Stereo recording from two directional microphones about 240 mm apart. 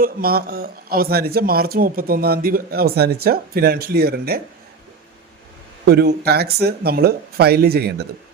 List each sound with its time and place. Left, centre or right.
0.0 s speech: right
5.8 s speech: right